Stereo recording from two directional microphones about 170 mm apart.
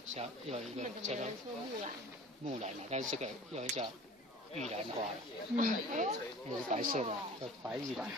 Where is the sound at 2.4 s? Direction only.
40° right (ahead or behind).